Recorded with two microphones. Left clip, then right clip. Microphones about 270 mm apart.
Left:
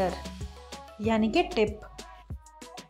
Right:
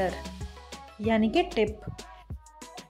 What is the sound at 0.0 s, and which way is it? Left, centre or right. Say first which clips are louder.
Speech: even; centre.